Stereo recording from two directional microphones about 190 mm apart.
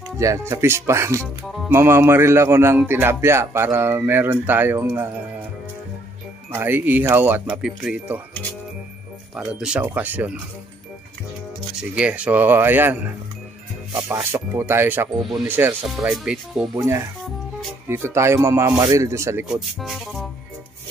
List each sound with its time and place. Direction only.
0.2 s speech: 15° right (ahead or behind)
6.5 s speech: 10° right (ahead or behind)
9.3 s speech: 5° right (ahead or behind)
11.7 s speech: 5° right (ahead or behind)
16.7 s speech: 15° right (ahead or behind)
19.4 s speech: centre (ahead or behind)